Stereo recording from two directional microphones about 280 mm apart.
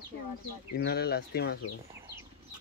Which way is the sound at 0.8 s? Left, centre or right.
Left.